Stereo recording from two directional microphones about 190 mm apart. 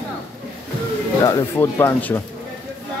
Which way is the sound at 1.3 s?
15° left (ahead or behind).